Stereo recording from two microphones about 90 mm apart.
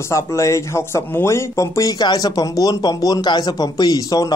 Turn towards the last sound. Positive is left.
turn(degrees=45)  # may be behind; listen again after turning